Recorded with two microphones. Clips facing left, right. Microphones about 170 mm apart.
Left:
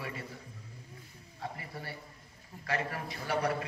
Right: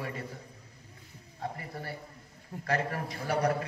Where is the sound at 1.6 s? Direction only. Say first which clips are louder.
Right 3 dB; 50° right (ahead or behind).